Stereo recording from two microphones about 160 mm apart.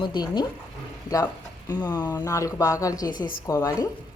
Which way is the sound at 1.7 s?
25° left (ahead or behind).